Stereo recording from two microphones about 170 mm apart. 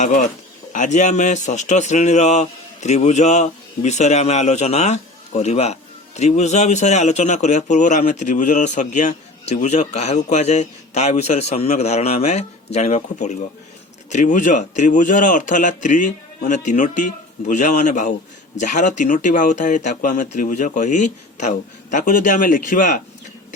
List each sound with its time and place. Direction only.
0.0 s a man's voice: 45° left (ahead or behind)